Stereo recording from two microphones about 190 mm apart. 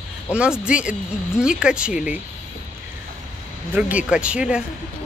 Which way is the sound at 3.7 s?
5° right (ahead or behind).